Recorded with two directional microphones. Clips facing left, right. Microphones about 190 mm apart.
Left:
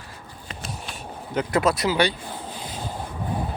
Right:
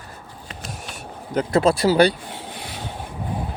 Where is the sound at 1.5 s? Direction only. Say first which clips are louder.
Right 5 dB; 30° right (ahead or behind).